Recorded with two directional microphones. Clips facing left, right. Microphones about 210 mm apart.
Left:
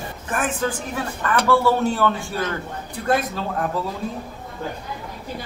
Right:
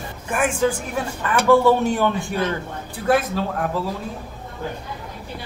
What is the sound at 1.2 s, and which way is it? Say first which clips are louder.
Speech: right 3 dB; 15° right (ahead or behind).